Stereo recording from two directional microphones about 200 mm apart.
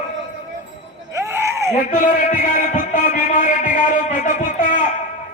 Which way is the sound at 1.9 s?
40° left (ahead or behind).